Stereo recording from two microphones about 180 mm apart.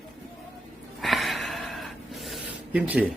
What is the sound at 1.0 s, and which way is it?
Gasp, centre (ahead or behind).